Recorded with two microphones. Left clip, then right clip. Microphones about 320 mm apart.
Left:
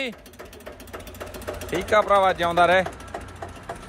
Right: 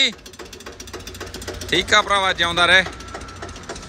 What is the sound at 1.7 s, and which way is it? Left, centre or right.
Speech, centre.